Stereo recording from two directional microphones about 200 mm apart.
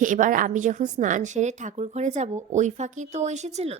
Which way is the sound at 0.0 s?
40° right (ahead or behind).